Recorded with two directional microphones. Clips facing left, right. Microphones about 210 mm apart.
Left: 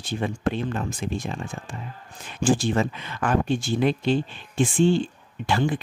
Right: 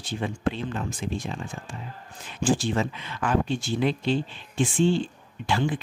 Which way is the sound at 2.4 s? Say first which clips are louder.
Left 3 dB; 50° left (ahead or behind).